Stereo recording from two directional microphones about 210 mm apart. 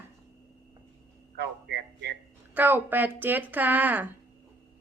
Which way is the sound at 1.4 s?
55° right (ahead or behind).